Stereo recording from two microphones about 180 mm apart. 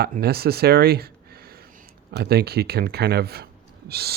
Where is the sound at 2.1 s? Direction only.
65° right (ahead or behind).